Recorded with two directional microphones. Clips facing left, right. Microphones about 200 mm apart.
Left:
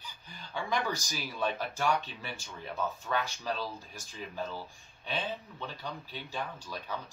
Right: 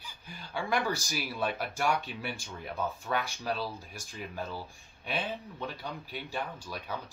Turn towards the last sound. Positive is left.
turn(degrees=-10)  # may be behind; listen again after turning